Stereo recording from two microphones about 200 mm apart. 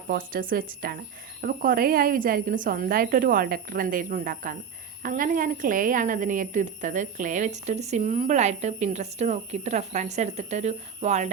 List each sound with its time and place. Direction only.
0.1 s a woman's voice: 45° right (ahead or behind)